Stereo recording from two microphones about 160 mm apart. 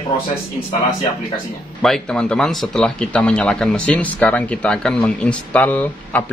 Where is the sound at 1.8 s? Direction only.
5° left (ahead or behind).